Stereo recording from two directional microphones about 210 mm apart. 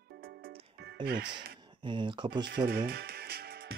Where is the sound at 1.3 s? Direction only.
20° right (ahead or behind).